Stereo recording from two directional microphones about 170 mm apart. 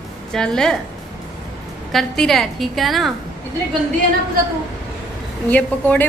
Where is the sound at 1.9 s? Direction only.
Centre (ahead or behind).